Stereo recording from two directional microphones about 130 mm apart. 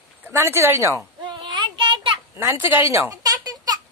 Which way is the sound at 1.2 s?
40° right (ahead or behind).